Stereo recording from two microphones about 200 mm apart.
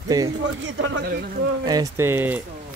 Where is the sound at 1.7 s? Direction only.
15° right (ahead or behind).